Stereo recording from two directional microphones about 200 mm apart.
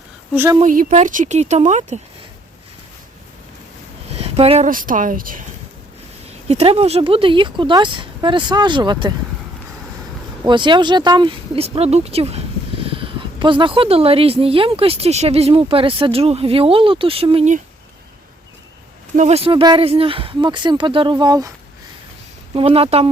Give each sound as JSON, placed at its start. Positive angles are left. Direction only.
{"t": 0.3, "sound": "a woman's voice", "side_deg": -10}
{"t": 0.6, "sound": "speech", "side_deg": -40}
{"t": 4.1, "sound": "speech", "side_deg": -30}
{"t": 6.2, "sound": "speech", "side_deg": -30}
{"t": 10.4, "sound": "speech", "side_deg": -25}
{"t": 19.1, "sound": "speech", "side_deg": -35}
{"t": 22.5, "sound": "speech", "side_deg": -30}